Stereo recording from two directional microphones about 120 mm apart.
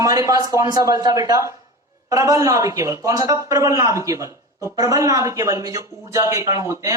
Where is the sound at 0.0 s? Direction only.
30° right (ahead or behind).